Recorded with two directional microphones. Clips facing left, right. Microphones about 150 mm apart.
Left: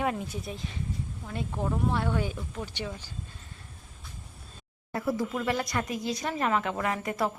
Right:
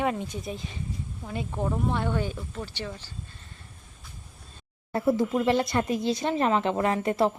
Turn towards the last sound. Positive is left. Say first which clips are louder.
# right 5 dB
turn(degrees=-30)  # may be behind; listen again after turning